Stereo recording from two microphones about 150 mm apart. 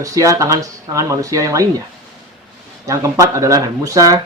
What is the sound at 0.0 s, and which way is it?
Speech, 20° right (ahead or behind).